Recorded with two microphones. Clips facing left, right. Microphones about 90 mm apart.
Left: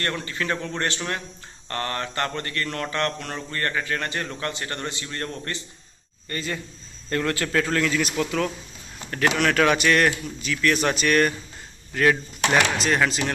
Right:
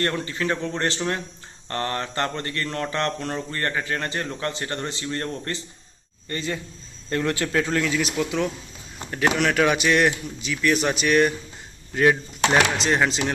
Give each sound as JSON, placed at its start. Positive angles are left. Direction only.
{"t": 0.0, "sound": "speech", "side_deg": -30}